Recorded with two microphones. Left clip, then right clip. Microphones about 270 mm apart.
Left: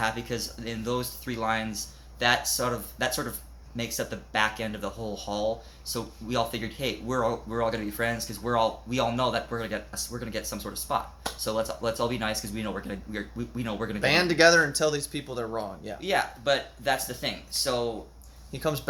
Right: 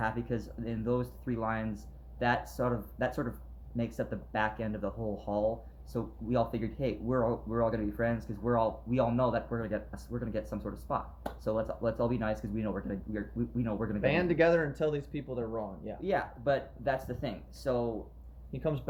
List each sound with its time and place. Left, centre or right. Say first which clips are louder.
0.0 s speech: left 5 dB; centre
14.0 s speech: left 7 dB; centre
16.0 s speech: left 5 dB; centre